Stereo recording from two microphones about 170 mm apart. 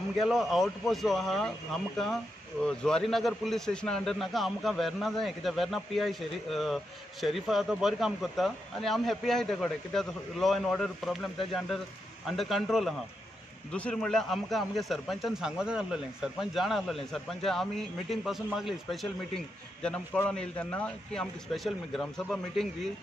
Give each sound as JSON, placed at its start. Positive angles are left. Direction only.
{"t": 0.2, "sound": "a man's voice", "side_deg": 0}
{"t": 12.3, "sound": "a man's voice", "side_deg": 0}